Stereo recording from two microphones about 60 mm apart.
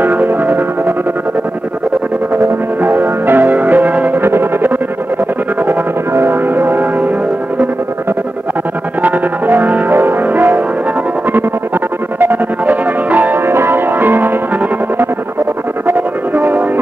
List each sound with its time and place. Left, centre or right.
0.0 s music: right
2.8 s music: right
4.2 s music: right
9.0 s music: right
12.2 s music: right
13.5 s music: right
16.3 s train: right